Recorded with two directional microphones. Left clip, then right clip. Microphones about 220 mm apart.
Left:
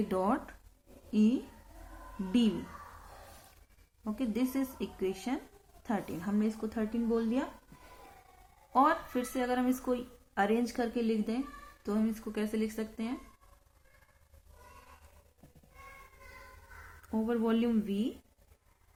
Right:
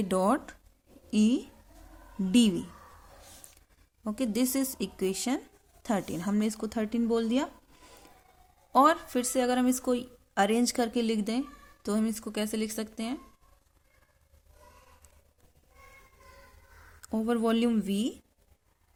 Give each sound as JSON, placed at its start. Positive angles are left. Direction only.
{"t": 0.1, "sound": "speech", "side_deg": -50}
{"t": 4.0, "sound": "speech", "side_deg": -50}
{"t": 8.7, "sound": "speech", "side_deg": -50}
{"t": 17.0, "sound": "speech", "side_deg": -50}